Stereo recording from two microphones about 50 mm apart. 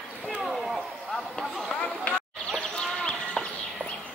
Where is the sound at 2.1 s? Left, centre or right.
Left.